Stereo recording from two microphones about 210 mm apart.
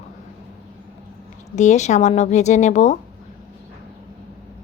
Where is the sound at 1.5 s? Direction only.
35° left (ahead or behind).